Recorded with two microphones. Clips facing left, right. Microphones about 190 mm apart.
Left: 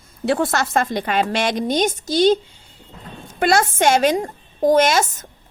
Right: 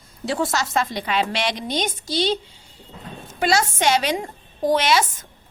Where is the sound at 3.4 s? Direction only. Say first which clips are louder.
Left 4 dB; 55° left (ahead or behind).